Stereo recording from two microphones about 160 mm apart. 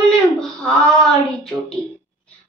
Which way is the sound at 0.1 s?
5° left (ahead or behind).